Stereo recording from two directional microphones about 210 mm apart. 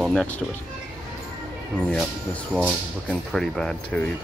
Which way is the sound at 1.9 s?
Centre (ahead or behind).